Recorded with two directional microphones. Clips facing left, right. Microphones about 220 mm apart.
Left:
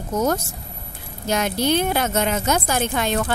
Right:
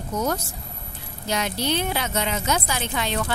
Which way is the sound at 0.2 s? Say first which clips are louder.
Left 5 dB; 45° left (ahead or behind).